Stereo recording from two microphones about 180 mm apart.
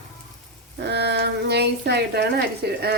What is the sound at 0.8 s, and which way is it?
Speech, 70° right (ahead or behind).